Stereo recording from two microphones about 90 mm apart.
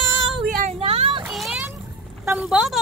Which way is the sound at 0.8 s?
90° right.